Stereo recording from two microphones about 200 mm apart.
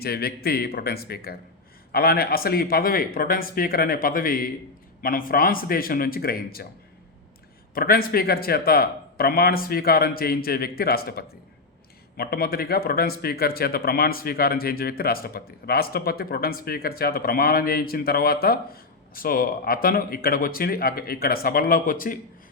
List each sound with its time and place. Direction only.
0.0 s speech: 50° left (ahead or behind)
7.7 s speech: 45° left (ahead or behind)